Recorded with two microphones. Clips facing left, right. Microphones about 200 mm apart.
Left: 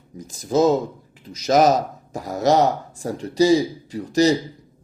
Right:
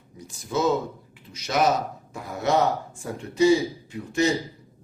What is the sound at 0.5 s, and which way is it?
Speech, 40° left (ahead or behind).